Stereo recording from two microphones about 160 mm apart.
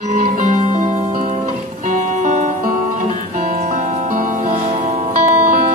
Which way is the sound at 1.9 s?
50° right (ahead or behind).